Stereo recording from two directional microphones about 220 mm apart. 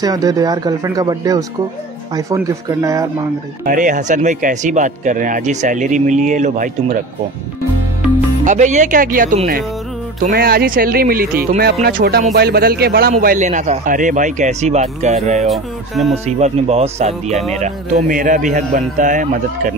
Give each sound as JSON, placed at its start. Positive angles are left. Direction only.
{"t": 0.0, "sound": "speech", "side_deg": -15}
{"t": 3.6, "sound": "speech", "side_deg": -35}
{"t": 8.5, "sound": "speech", "side_deg": -35}
{"t": 15.4, "sound": "speech", "side_deg": 0}
{"t": 16.3, "sound": "speech", "side_deg": -30}
{"t": 17.3, "sound": "speech", "side_deg": 0}
{"t": 18.0, "sound": "speech", "side_deg": -40}